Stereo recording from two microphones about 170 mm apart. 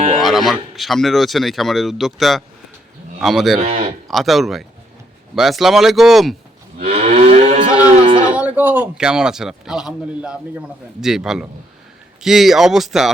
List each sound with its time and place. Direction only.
0.2 s speech: centre (ahead or behind)
6.7 s moo: 40° right (ahead or behind)
7.9 s a sound: 30° right (ahead or behind)
8.3 s speech: 10° right (ahead or behind)